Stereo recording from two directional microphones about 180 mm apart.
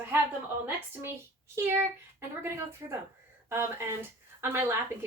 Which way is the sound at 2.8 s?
20° right (ahead or behind).